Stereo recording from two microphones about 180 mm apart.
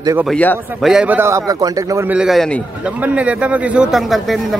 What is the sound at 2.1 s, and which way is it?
A man's voice, centre (ahead or behind).